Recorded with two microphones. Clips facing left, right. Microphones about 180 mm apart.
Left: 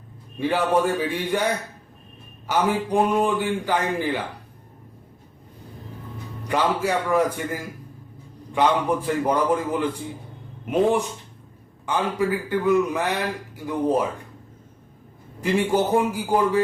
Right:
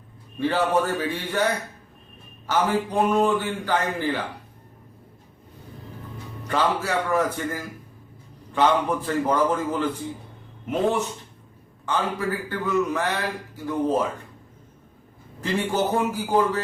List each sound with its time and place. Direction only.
0.3 s a man's voice: 10° left (ahead or behind)
2.5 s a man's voice: 15° left (ahead or behind)
6.5 s a man's voice: 15° left (ahead or behind)
15.4 s a man's voice: 10° left (ahead or behind)